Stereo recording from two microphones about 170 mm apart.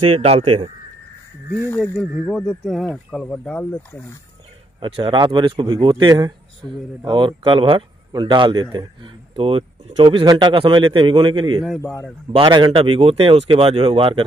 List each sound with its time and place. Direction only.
0.1 s speech: 35° right (ahead or behind)
2.2 s speech: 5° left (ahead or behind)
4.7 s speech: 30° right (ahead or behind)